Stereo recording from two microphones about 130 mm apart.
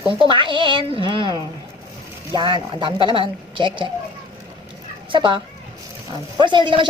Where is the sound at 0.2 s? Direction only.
40° right (ahead or behind).